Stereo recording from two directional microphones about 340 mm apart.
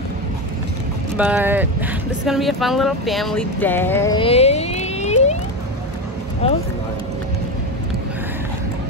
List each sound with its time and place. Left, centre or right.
1.1 s speech: centre
6.4 s speech: centre